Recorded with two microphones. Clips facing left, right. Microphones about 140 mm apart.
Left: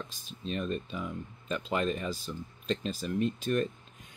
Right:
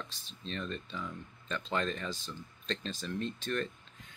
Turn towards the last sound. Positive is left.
turn(degrees=15)  # may be behind; listen again after turning